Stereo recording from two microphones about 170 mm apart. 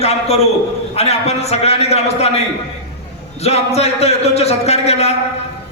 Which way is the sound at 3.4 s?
40° left (ahead or behind).